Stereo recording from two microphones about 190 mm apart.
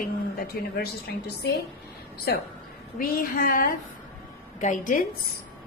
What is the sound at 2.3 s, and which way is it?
A woman's voice, 55° left (ahead or behind).